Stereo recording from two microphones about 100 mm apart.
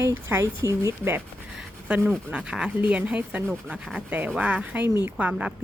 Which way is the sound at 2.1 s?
10° right (ahead or behind).